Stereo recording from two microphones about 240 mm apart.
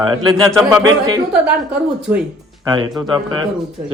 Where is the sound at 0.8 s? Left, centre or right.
Centre.